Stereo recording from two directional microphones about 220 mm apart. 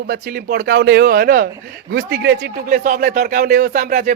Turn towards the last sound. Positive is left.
turn(degrees=-40)  # may be behind; listen again after turning